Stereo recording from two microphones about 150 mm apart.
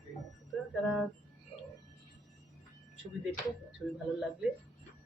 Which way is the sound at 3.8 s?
Centre (ahead or behind).